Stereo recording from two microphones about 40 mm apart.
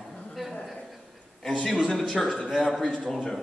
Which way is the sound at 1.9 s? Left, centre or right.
Left.